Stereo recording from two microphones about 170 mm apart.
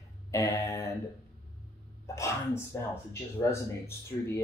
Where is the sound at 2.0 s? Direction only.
15° left (ahead or behind).